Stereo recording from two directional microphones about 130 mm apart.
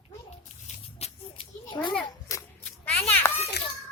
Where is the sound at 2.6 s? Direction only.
15° left (ahead or behind).